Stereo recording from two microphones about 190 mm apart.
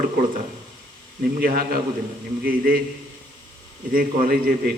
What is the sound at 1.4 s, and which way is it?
A man's voice, 50° right (ahead or behind).